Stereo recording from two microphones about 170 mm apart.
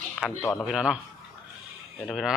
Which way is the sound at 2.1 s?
Centre (ahead or behind).